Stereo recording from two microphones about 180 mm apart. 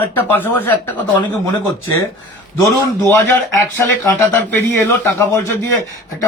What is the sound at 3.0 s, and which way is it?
Speech, 15° left (ahead or behind).